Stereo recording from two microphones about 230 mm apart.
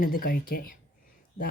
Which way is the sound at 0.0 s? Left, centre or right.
Left.